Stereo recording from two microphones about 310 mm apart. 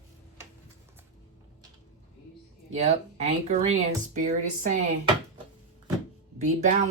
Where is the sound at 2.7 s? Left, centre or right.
Right.